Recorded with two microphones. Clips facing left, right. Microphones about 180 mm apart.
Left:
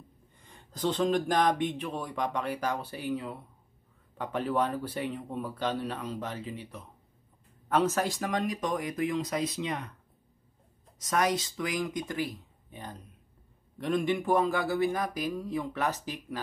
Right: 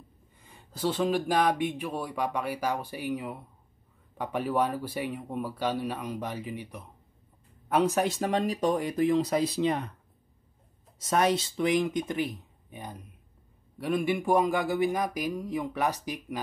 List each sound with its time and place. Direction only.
0.4 s speech: 10° right (ahead or behind); by 9.8 s 35° right (ahead or behind)
11.0 s speech: 25° right (ahead or behind)